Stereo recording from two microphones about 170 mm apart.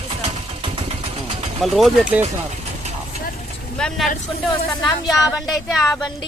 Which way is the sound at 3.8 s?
5° left (ahead or behind).